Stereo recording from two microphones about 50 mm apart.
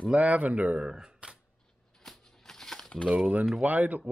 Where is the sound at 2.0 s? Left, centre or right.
Centre.